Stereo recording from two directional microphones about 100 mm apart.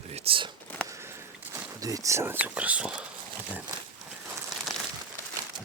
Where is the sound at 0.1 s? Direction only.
80° right; by 0.5 s 60° right (ahead or behind).